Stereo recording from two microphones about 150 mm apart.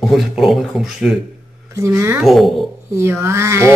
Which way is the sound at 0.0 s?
Centre (ahead or behind).